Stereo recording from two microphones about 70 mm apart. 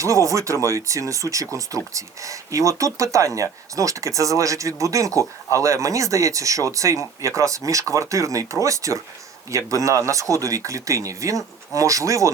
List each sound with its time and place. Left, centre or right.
0.0 s speech: right